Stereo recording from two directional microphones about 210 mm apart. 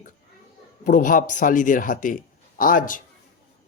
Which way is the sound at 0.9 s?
40° left (ahead or behind).